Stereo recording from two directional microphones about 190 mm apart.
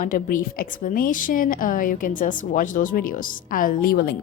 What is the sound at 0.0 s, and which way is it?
A woman's voice, 45° left (ahead or behind).